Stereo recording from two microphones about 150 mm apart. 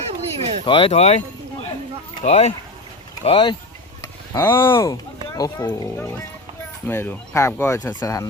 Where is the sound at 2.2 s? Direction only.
45° left (ahead or behind).